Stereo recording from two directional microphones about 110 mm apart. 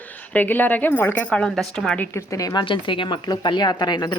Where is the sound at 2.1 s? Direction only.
30° left (ahead or behind).